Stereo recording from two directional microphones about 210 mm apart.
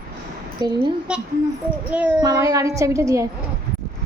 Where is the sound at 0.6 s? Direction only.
20° right (ahead or behind).